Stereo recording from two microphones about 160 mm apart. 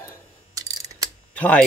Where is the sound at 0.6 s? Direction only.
20° right (ahead or behind).